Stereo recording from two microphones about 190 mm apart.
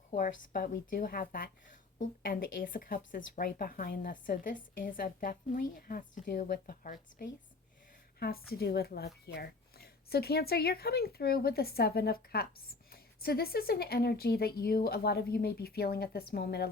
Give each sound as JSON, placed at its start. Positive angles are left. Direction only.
{"t": 0.1, "sound": "speech", "side_deg": 45}